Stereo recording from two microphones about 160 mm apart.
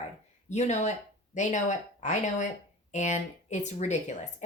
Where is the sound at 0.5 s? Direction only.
45° left (ahead or behind).